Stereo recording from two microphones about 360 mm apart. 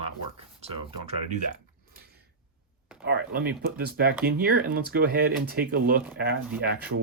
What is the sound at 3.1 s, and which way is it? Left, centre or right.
Speech, right.